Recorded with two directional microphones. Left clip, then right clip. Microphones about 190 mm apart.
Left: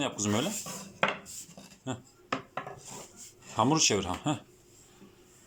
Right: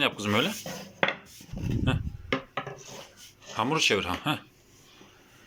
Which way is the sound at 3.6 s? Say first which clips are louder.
Right 1 dB; 10° left (ahead or behind).